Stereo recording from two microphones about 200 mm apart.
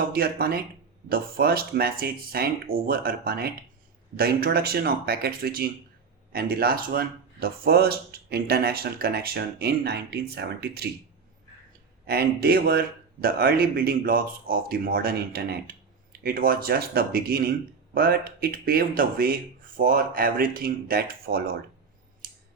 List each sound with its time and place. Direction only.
0.1 s speech: 50° right (ahead or behind)
12.0 s speech: 50° right (ahead or behind)
22.2 s scissors: 45° right (ahead or behind)